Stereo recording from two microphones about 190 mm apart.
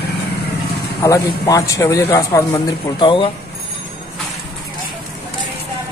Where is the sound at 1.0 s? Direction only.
15° left (ahead or behind).